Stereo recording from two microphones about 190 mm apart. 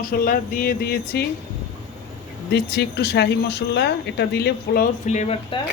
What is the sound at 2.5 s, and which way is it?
Speech, 60° left (ahead or behind).